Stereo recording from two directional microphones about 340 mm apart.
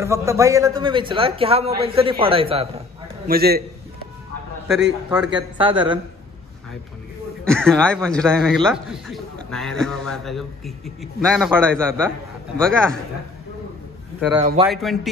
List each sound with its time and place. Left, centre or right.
0.0 s a man's voice: centre
3.3 s a man's voice: right
5.3 s a man's voice: centre
7.4 s speech: centre
14.3 s a man's voice: centre
14.7 s speech: centre